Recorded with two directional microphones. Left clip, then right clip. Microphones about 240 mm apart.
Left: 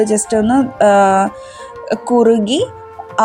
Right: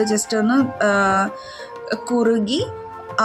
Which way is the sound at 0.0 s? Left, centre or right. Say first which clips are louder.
Left 5 dB; centre.